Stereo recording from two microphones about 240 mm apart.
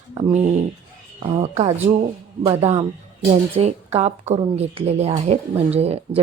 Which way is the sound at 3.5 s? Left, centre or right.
Right.